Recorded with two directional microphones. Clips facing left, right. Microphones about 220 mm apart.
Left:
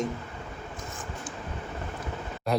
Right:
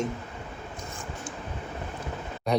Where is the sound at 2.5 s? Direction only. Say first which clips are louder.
Right 2 dB; centre (ahead or behind).